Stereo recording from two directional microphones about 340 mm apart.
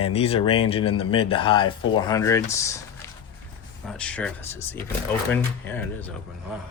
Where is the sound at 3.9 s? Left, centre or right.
Centre.